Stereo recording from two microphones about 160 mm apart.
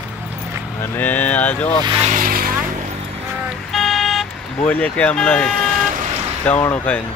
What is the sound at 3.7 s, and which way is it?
Vehicle, centre (ahead or behind).